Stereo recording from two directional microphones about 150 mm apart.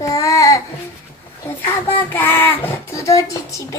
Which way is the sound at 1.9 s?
15° left (ahead or behind).